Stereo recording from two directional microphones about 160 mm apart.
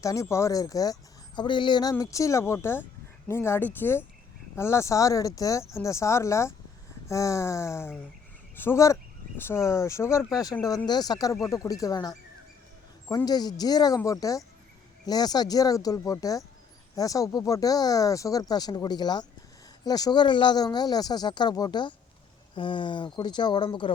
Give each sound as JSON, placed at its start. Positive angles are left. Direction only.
{"t": 0.0, "sound": "speech", "side_deg": 20}